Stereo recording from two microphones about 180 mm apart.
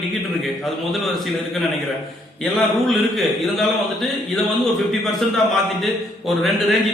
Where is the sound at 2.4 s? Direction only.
Centre (ahead or behind).